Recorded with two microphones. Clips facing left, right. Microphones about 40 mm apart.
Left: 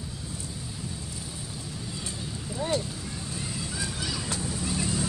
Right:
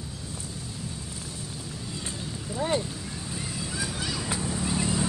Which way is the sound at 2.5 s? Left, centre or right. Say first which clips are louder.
Right 2 dB; centre.